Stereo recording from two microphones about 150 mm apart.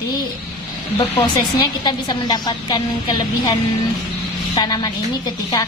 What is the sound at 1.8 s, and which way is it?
Speech, 30° left (ahead or behind).